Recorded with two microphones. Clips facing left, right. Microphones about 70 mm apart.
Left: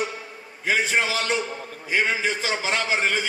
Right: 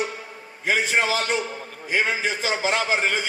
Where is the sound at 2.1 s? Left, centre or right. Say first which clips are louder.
Left 1 dB; left.